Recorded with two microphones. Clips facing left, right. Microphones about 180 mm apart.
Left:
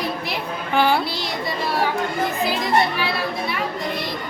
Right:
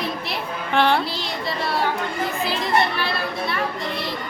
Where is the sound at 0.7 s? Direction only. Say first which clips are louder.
Even; 5° left (ahead or behind).